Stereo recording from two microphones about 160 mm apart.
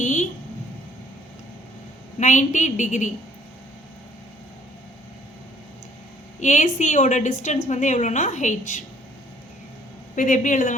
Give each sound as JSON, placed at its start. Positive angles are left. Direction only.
{"t": 0.0, "sound": "a sound", "side_deg": 50}
{"t": 2.1, "sound": "a woman's voice", "side_deg": 50}
{"t": 6.4, "sound": "a woman's voice", "side_deg": 50}
{"t": 10.2, "sound": "a woman's voice", "side_deg": 55}